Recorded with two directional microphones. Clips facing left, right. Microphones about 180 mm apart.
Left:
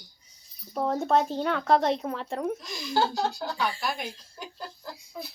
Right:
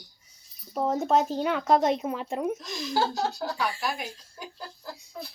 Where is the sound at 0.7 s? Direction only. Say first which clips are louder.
Even; 5° right (ahead or behind).